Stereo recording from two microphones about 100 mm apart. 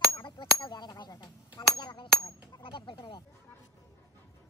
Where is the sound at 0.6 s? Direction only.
45° left (ahead or behind).